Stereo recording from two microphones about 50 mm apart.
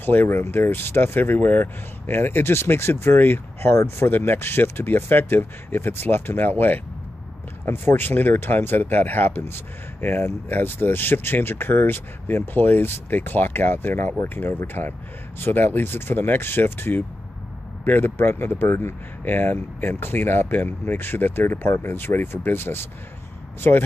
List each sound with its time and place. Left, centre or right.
0.0 s speech: left
3.7 s speech: left
4.1 s speech: left
7.6 s speech: left